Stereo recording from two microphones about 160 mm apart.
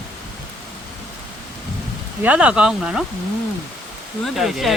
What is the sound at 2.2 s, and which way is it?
Speech, 10° right (ahead or behind).